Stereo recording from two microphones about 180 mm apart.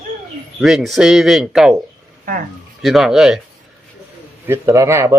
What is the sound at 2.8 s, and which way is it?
Speech, centre (ahead or behind).